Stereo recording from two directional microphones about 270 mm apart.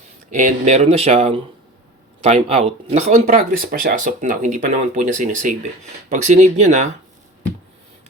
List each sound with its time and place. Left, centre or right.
0.3 s speech: right